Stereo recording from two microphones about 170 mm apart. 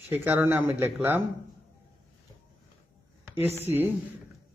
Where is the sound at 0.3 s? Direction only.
10° right (ahead or behind).